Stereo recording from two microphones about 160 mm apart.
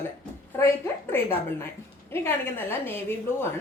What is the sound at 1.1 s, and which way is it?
A woman's voice, 15° left (ahead or behind).